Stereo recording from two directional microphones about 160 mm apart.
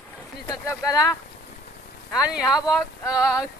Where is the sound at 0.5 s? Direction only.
20° left (ahead or behind).